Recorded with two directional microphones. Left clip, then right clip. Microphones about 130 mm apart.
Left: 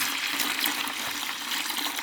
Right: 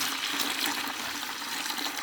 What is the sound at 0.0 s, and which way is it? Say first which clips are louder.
Water: left 2 dB; 5° right (ahead or behind).